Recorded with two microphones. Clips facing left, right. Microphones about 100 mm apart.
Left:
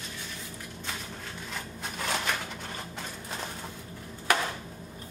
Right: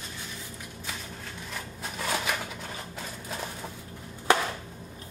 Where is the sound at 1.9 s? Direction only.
5° right (ahead or behind).